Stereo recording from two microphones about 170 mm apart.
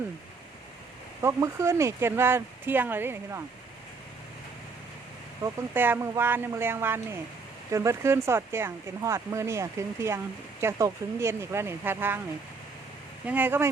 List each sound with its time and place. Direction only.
1.2 s speech: 15° right (ahead or behind)
5.4 s speech: 15° right (ahead or behind)
13.2 s speech: 10° right (ahead or behind)